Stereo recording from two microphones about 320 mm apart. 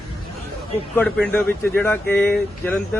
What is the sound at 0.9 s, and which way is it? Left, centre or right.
Speech, centre.